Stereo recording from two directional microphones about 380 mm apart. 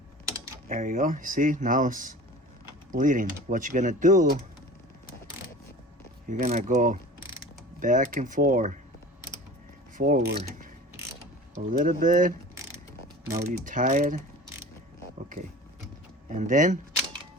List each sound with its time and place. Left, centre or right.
0.3 s typing: centre
0.7 s speech: right
6.2 s speech: centre
10.0 s speech: right
13.3 s speech: centre
16.3 s speech: centre